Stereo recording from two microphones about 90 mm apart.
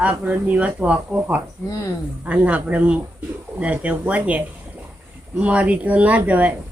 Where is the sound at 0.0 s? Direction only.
15° right (ahead or behind).